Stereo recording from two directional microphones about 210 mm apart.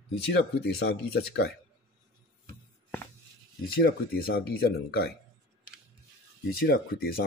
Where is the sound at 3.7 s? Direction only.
45° left (ahead or behind).